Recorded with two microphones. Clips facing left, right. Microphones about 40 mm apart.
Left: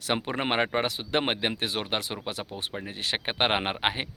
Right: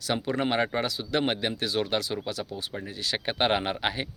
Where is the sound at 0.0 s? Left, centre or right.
Left.